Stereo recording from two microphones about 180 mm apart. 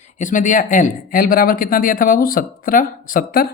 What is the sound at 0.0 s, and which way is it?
A man's voice, 45° left (ahead or behind).